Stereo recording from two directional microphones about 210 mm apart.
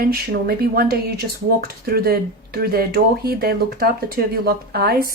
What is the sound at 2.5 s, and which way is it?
Speech, 50° right (ahead or behind).